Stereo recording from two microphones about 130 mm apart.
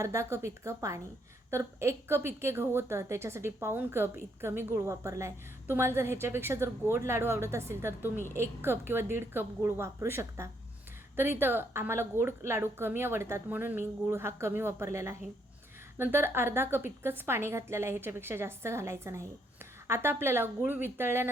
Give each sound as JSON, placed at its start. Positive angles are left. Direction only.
{"t": 0.0, "sound": "a woman's voice", "side_deg": -25}